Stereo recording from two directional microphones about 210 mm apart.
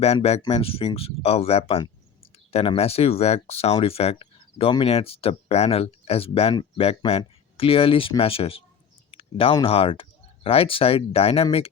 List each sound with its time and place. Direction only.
0.0 s speech: 30° left (ahead or behind)